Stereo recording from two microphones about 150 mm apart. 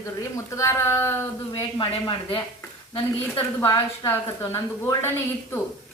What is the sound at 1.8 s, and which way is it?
Speech, 35° left (ahead or behind).